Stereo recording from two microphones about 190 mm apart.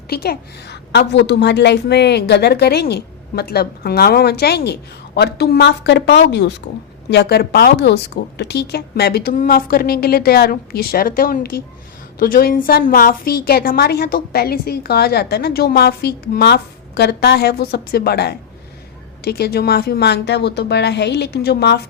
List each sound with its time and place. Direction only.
0.1 s a woman's voice: 55° left (ahead or behind)